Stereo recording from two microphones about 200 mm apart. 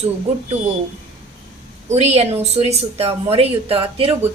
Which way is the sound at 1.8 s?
35° right (ahead or behind).